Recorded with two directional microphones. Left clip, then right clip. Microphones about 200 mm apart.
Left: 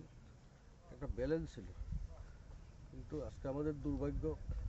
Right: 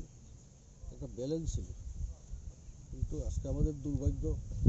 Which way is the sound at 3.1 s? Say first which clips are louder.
Right 1 dB; 25° left (ahead or behind).